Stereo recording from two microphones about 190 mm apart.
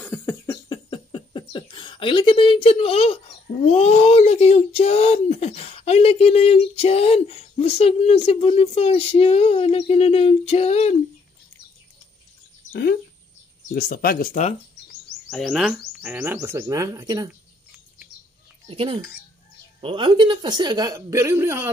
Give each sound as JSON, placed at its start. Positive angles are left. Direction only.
{"t": 0.0, "sound": "a sound", "side_deg": 10}
{"t": 0.8, "sound": "speech", "side_deg": 25}
{"t": 13.6, "sound": "speech", "side_deg": 50}
{"t": 15.2, "sound": "speech", "side_deg": 0}
{"t": 18.7, "sound": "speech", "side_deg": -30}